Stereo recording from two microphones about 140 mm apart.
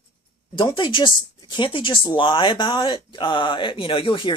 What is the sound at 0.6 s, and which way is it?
Speech, 35° left (ahead or behind).